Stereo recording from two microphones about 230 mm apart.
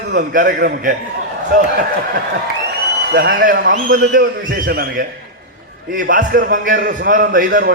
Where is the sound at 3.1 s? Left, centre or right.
Right.